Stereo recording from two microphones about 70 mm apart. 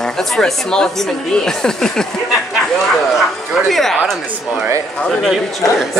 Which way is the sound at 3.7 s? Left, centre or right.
Centre.